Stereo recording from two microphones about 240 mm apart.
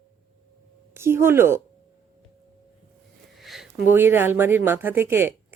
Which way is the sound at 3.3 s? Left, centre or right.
Centre.